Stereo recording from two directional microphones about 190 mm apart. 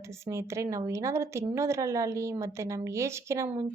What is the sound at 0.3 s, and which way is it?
Speech, 15° right (ahead or behind).